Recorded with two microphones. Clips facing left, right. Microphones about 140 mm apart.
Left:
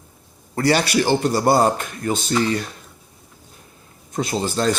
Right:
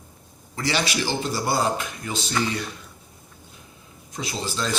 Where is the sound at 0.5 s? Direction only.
55° left (ahead or behind).